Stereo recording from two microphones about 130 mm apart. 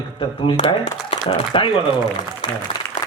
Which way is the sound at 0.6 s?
60° left (ahead or behind).